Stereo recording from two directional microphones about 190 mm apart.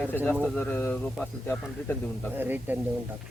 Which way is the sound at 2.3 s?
10° right (ahead or behind).